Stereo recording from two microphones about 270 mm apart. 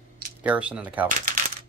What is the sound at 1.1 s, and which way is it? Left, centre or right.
Speech, right.